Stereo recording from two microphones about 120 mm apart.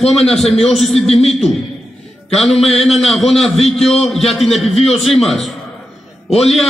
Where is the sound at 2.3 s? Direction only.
Centre (ahead or behind).